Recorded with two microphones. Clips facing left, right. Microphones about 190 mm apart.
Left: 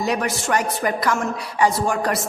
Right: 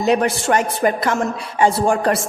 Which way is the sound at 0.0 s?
25° right (ahead or behind).